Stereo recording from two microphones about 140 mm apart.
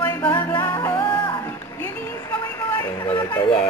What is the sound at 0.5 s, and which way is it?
Music, 15° left (ahead or behind).